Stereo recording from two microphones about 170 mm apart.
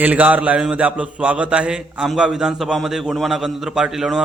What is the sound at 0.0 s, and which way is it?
A man's voice, 10° right (ahead or behind).